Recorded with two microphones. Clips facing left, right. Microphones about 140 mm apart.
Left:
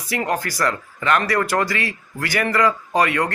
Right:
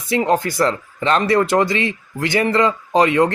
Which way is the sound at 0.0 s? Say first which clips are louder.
Right 6 dB; 25° right (ahead or behind).